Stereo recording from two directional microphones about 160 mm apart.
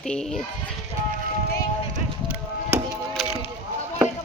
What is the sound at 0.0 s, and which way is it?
Speech, 5° left (ahead or behind).